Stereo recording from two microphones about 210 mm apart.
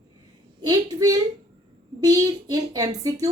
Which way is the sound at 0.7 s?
15° right (ahead or behind).